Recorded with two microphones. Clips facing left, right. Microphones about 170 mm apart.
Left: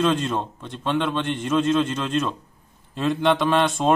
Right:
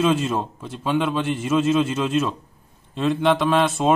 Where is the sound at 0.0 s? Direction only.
5° right (ahead or behind).